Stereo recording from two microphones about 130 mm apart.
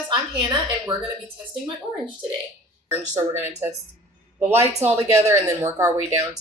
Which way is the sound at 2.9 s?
20° right (ahead or behind).